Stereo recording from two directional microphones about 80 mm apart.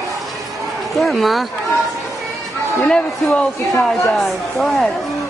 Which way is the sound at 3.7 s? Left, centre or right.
Centre.